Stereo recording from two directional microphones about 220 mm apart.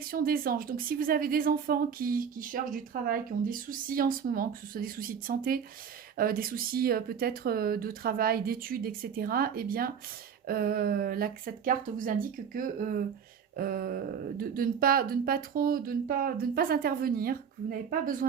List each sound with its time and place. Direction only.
0.0 s speech: 40° right (ahead or behind)